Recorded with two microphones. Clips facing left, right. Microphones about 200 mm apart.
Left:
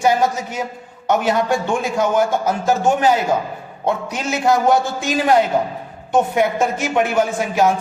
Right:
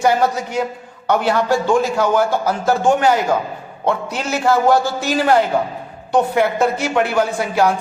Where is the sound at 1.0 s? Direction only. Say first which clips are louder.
Right 1 dB; 20° left (ahead or behind).